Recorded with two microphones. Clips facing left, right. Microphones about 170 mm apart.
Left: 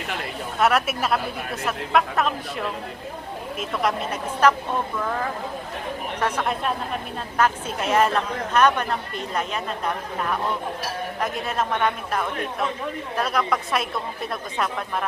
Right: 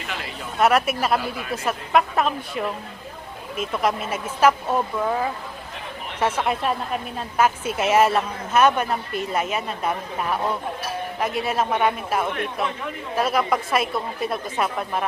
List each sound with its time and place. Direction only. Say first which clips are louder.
0.6 s a woman's voice: right 2 dB; centre (ahead or behind)
6.3 s a woman's voice: right 2 dB; 5° right (ahead or behind)